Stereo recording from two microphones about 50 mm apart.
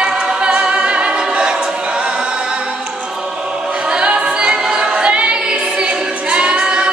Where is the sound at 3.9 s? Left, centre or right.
Centre.